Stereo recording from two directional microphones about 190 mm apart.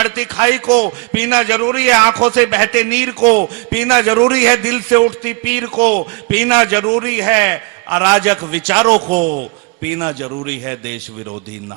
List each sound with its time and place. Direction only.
0.0 s a man's voice: 10° right (ahead or behind)
9.2 s a man's voice: 45° right (ahead or behind)
9.8 s a man's voice: 10° right (ahead or behind)